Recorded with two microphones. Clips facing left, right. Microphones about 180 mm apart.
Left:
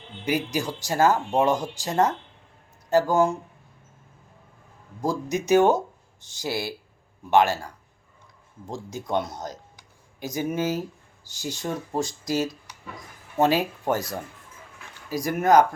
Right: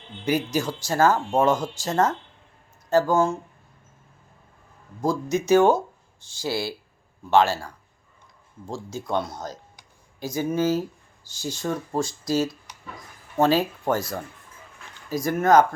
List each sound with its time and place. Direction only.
0.3 s speech: 15° left (ahead or behind)
5.0 s speech: 15° left (ahead or behind)
9.0 s speech: 20° left (ahead or behind)
15.1 s speech: 15° left (ahead or behind)